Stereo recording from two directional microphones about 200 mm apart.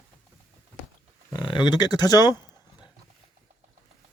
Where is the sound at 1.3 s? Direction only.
20° left (ahead or behind).